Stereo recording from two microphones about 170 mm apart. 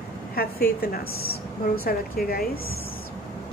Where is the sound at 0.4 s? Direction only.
65° left (ahead or behind).